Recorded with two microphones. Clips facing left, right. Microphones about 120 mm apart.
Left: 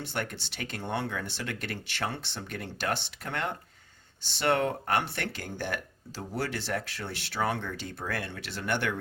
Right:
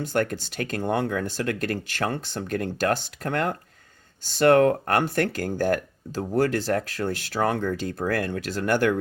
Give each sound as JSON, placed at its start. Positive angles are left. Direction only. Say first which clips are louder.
{"t": 0.1, "sound": "speech", "louder": "right 10 dB", "side_deg": -45}